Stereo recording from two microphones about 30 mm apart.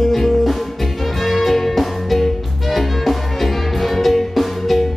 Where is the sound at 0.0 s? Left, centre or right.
Centre.